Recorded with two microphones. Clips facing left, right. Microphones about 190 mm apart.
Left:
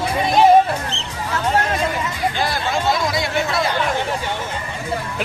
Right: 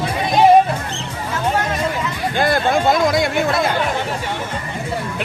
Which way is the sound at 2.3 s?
50° right (ahead or behind).